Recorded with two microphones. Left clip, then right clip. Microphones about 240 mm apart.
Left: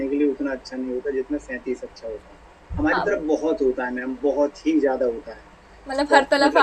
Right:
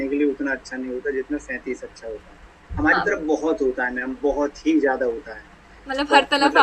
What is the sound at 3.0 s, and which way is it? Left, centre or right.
Speech, centre.